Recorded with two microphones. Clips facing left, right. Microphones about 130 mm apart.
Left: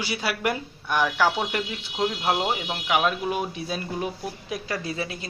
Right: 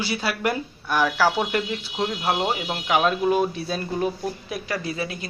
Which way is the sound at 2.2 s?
Centre (ahead or behind).